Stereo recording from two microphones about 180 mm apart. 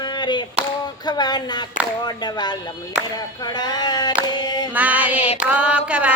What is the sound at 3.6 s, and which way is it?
Music, 25° left (ahead or behind).